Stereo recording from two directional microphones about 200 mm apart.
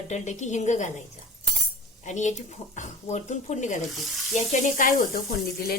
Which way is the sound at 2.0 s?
35° left (ahead or behind).